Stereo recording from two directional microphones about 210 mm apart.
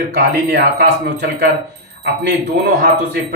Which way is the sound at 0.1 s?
50° right (ahead or behind).